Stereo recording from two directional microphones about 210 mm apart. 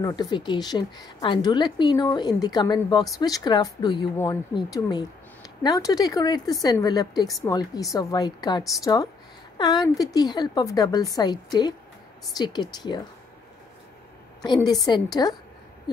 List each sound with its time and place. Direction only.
0.0 s a woman's voice: 20° left (ahead or behind)
14.4 s a woman's voice: 20° left (ahead or behind)